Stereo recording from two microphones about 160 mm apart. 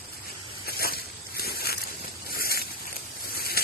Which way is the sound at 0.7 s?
70° left (ahead or behind).